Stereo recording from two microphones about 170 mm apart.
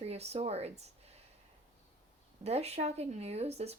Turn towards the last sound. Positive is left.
turn(degrees=-40)  # may be behind; listen again after turning